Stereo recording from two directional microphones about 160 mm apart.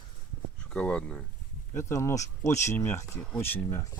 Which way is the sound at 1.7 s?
15° left (ahead or behind).